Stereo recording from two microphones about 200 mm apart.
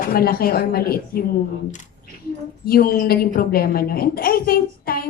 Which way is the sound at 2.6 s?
50° left (ahead or behind).